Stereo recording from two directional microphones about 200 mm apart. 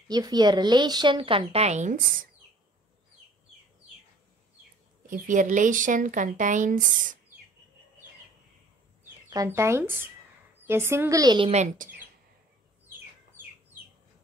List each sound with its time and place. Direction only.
0.1 s speech: 20° right (ahead or behind); by 2.2 s 40° right (ahead or behind)
5.0 s speech: 40° right (ahead or behind)
9.3 s a woman's voice: 15° right (ahead or behind); by 11.9 s 35° right (ahead or behind)